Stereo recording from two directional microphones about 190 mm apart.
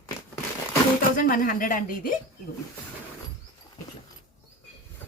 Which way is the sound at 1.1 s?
45° left (ahead or behind).